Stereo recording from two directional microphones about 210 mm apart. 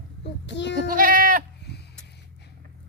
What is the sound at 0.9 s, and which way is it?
Goat, 40° right (ahead or behind).